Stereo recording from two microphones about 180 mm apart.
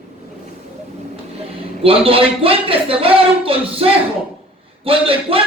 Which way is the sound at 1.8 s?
30° right (ahead or behind).